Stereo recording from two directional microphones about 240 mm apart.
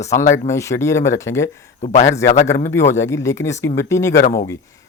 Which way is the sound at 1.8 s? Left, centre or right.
Left.